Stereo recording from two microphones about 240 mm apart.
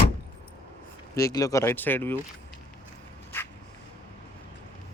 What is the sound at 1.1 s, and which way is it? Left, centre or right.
Speech, centre.